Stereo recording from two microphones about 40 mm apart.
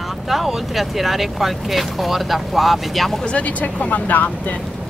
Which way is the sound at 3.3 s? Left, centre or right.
Left.